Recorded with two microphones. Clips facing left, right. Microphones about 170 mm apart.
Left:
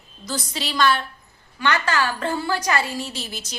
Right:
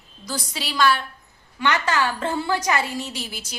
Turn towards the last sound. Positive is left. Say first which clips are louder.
# left 1 dB
turn(degrees=-10)  # may be behind; listen again after turning